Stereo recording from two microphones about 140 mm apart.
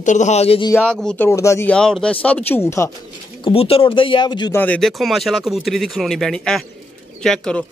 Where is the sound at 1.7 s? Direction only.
5° left (ahead or behind).